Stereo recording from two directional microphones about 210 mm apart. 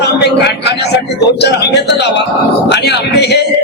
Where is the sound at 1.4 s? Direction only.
55° left (ahead or behind).